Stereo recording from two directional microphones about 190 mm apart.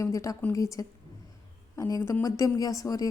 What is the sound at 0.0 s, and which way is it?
A woman's voice, 15° left (ahead or behind).